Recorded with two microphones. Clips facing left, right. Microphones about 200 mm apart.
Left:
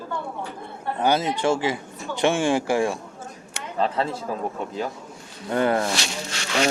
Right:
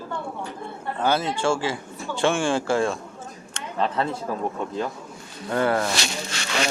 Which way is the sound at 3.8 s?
30° left (ahead or behind).